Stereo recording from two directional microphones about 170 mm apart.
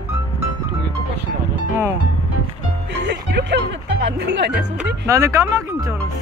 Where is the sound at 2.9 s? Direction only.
90° right.